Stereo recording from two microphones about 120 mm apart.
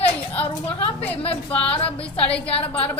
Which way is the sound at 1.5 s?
10° left (ahead or behind).